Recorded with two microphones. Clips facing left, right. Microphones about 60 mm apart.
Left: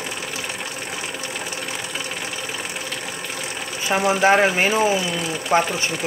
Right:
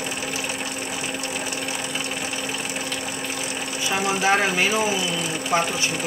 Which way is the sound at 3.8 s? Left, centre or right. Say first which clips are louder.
Left 5 dB; left.